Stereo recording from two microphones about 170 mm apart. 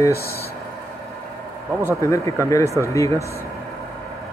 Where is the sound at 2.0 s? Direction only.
20° left (ahead or behind).